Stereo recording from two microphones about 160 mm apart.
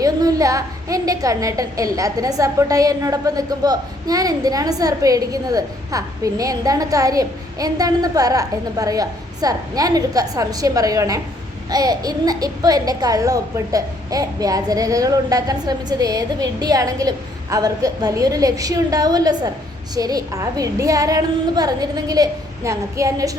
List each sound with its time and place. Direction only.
0.0 s a woman's voice: 20° right (ahead or behind)